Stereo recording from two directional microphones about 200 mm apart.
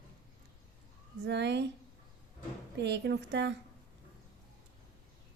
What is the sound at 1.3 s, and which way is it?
Speech, 60° right (ahead or behind).